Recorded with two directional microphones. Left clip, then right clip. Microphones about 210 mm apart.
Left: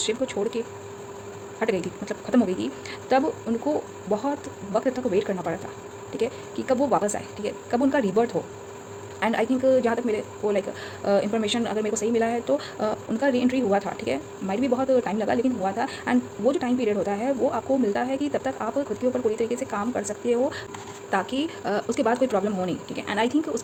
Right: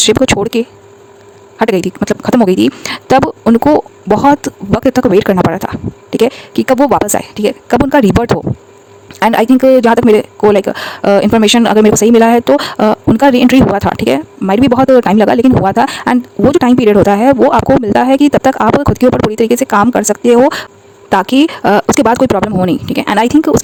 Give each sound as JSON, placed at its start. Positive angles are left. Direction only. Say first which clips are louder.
{"t": 0.0, "sound": "a man's voice", "louder": "right 16 dB", "side_deg": -50}